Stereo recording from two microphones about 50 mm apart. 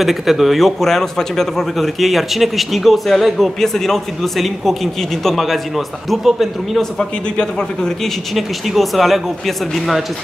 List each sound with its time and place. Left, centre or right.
0.0 s a man's voice: centre
2.0 s a man's voice: centre
6.8 s a man's voice: centre
8.4 s a man's voice: centre